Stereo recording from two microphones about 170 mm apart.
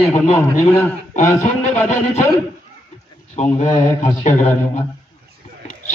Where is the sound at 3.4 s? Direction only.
45° left (ahead or behind).